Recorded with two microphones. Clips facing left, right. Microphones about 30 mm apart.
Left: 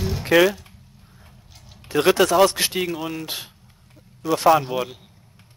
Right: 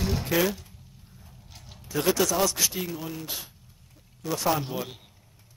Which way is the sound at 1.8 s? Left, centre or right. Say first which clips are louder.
Left 7 dB; left.